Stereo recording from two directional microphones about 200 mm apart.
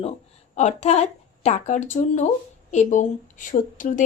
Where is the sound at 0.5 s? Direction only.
35° left (ahead or behind).